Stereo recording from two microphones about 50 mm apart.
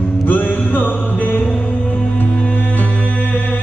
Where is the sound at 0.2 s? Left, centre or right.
Left.